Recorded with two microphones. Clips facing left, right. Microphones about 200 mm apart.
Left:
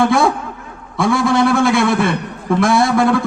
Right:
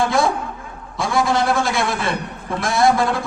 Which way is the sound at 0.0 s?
55° left (ahead or behind).